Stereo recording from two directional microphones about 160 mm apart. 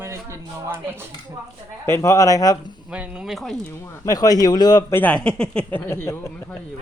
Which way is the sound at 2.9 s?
5° right (ahead or behind).